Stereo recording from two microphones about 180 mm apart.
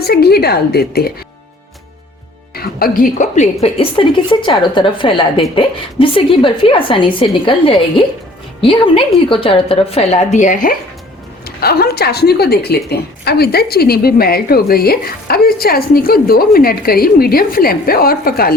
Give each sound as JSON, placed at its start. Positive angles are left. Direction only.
{"t": 0.0, "sound": "a woman's voice", "side_deg": 60}
{"t": 2.6, "sound": "a woman's voice", "side_deg": 55}
{"t": 11.4, "sound": "a woman's voice", "side_deg": 60}